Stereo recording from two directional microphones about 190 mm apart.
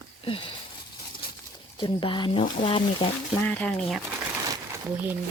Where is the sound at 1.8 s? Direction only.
25° left (ahead or behind).